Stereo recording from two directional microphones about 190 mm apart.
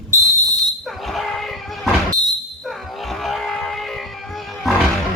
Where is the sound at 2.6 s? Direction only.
Centre (ahead or behind).